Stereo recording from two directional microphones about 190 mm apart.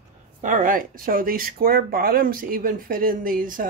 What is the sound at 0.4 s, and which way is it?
Speech, 45° right (ahead or behind).